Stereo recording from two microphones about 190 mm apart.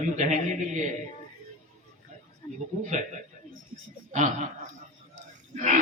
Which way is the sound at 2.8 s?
40° right (ahead or behind).